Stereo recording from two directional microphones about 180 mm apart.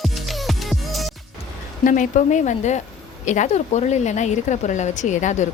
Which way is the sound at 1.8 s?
45° left (ahead or behind).